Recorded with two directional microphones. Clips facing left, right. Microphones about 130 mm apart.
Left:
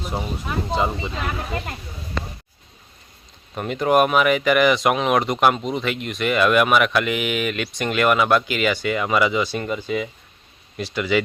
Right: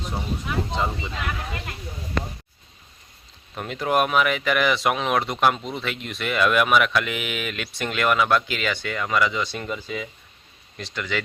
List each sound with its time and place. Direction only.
0.2 s speech: 40° left (ahead or behind)
3.5 s speech: 5° left (ahead or behind)
9.4 s speech: centre (ahead or behind)